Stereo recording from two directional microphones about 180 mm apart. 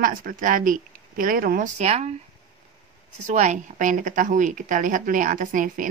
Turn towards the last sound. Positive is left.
turn(degrees=-45)  # may be behind; listen again after turning